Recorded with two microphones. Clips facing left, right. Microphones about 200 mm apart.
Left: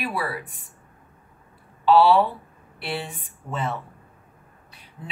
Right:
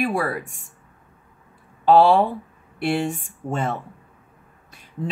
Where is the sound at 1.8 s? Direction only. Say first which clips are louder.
Right 2 dB; 50° right (ahead or behind).